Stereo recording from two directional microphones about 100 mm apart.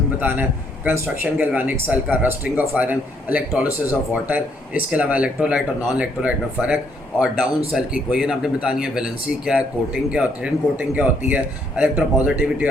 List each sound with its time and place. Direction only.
0.2 s a man's voice: 20° right (ahead or behind)